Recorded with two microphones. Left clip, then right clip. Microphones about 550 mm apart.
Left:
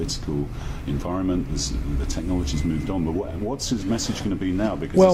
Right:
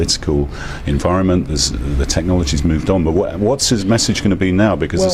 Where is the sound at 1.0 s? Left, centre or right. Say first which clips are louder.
Right 11 dB; right.